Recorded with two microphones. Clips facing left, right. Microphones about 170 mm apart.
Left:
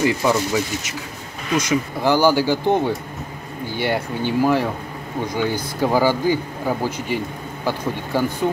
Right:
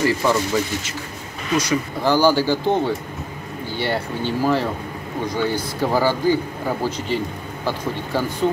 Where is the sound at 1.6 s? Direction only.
15° left (ahead or behind).